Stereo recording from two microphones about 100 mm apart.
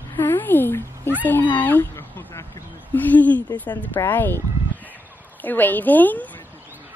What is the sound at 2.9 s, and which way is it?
A woman's voice, 15° left (ahead or behind).